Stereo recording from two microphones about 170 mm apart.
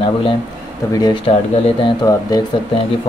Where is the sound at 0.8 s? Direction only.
15° left (ahead or behind).